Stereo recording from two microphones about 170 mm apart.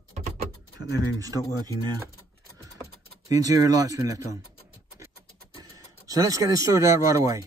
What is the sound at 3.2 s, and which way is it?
Speech, 20° right (ahead or behind).